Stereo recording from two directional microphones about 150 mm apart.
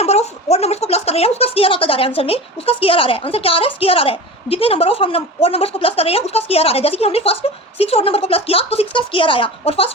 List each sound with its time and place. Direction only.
0.0 s speech: 45° left (ahead or behind)